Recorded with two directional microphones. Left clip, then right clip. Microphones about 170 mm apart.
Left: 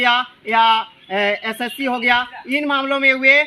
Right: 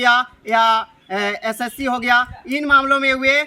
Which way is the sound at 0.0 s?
20° right (ahead or behind).